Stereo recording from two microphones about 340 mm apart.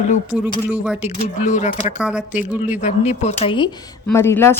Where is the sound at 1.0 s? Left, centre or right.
Centre.